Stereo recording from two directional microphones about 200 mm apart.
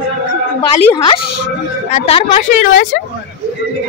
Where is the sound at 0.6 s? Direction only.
25° left (ahead or behind).